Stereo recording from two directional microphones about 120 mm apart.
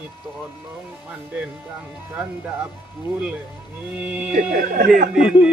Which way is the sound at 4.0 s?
10° right (ahead or behind).